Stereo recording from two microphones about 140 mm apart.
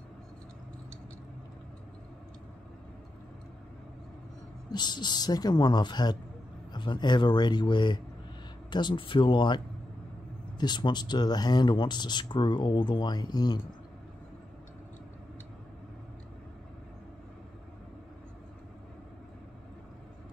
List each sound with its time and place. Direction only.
4.6 s speech: 30° left (ahead or behind)
10.6 s speech: 30° left (ahead or behind)